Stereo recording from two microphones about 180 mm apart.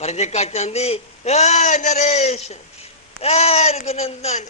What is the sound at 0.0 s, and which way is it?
A woman's voice, 35° left (ahead or behind).